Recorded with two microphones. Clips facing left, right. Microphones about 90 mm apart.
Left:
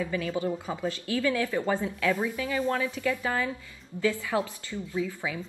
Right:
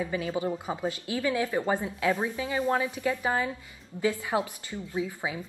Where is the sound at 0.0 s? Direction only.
25° right (ahead or behind).